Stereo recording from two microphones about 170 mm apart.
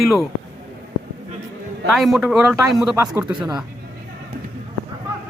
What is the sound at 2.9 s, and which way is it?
Speech, 20° right (ahead or behind).